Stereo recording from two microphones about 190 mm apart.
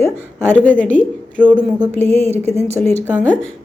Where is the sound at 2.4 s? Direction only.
35° right (ahead or behind).